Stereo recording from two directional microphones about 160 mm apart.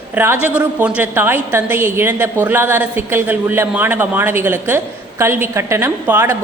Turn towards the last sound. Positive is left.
turn(degrees=-15)  # may be behind; listen again after turning